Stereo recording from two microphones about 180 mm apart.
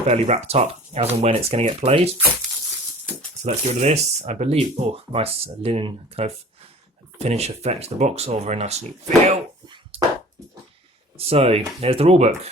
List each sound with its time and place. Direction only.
0.0 s speech: 40° right (ahead or behind)
3.4 s speech: 40° right (ahead or behind)
11.3 s speech: 35° right (ahead or behind)